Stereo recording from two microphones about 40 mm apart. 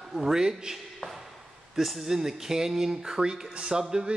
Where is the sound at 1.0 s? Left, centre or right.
Centre.